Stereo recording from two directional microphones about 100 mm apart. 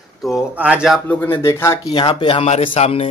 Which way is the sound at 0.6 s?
15° right (ahead or behind).